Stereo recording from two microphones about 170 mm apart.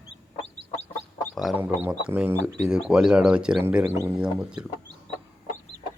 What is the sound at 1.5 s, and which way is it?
Speech, 10° right (ahead or behind).